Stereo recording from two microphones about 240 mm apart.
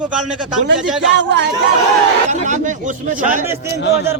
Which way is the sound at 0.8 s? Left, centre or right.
Centre.